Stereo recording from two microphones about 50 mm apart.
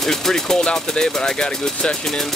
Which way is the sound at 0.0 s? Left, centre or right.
Centre.